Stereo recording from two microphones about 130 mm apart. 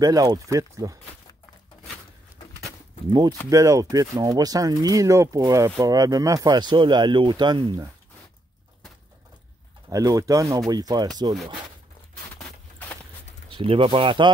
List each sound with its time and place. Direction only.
0.0 s speech: 30° right (ahead or behind)
3.1 s speech: 30° right (ahead or behind)
9.8 s speech: 25° right (ahead or behind)
13.5 s speech: 40° right (ahead or behind)